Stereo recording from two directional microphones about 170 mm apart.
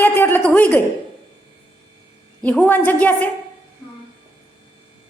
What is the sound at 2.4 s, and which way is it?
Speech, 10° left (ahead or behind).